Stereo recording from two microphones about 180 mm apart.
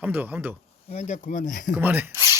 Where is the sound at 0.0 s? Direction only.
10° right (ahead or behind).